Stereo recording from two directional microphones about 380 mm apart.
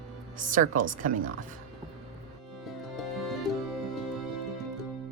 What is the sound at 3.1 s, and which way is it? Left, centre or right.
Music, centre.